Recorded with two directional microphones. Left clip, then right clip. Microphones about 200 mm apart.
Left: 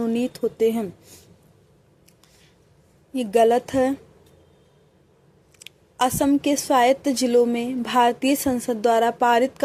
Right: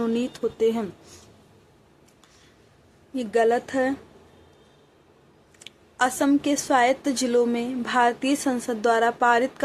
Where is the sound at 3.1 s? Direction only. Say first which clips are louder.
Left 4 dB; 35° left (ahead or behind).